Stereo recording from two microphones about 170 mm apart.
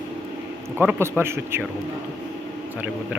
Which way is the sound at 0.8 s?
15° right (ahead or behind).